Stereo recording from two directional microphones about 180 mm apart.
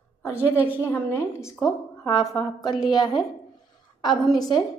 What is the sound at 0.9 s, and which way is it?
A woman's voice, 15° left (ahead or behind).